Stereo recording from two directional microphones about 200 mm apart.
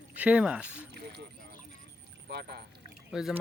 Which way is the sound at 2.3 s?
55° right (ahead or behind).